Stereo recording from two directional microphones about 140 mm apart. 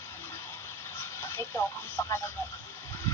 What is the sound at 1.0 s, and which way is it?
Speech, 20° left (ahead or behind).